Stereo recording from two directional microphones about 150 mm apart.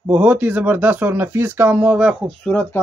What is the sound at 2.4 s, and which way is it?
Speech, 10° left (ahead or behind).